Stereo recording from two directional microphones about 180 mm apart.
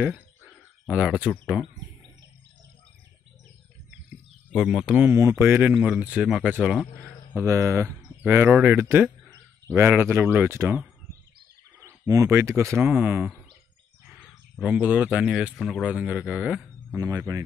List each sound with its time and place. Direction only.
0.0 s speech: 5° right (ahead or behind)
4.5 s speech: centre (ahead or behind)
7.3 s speech: 15° right (ahead or behind)